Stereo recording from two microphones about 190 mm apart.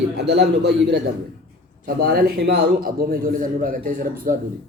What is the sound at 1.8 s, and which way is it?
A man's voice, 50° right (ahead or behind).